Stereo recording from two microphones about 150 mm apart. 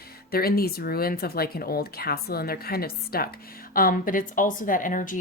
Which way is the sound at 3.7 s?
70° left (ahead or behind).